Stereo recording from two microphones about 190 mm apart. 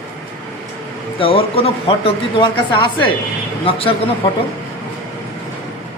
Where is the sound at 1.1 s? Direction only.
30° left (ahead or behind).